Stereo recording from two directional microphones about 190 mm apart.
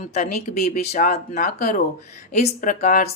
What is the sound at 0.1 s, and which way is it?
Speech, 45° left (ahead or behind).